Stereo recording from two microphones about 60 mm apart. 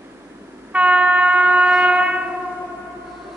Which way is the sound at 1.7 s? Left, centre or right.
Centre.